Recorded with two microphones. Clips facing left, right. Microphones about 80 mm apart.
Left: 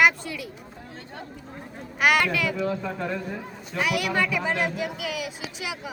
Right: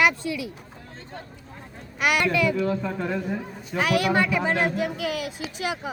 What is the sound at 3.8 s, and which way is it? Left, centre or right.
Speech, right.